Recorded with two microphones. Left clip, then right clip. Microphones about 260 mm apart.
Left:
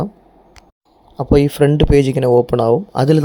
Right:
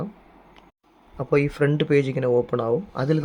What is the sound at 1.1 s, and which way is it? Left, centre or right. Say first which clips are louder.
Speech: left 8 dB; centre.